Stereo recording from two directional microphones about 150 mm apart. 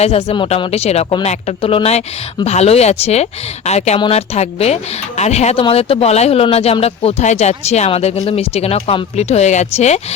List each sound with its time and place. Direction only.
0.0 s speech: 40° left (ahead or behind)